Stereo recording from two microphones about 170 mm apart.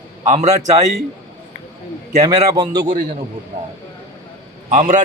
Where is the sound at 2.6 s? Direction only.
25° right (ahead or behind).